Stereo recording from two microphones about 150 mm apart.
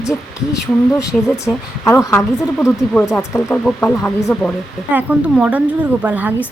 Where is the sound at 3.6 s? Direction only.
5° left (ahead or behind).